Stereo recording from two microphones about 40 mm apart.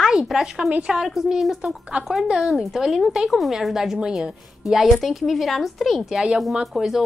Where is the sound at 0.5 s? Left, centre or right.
Right.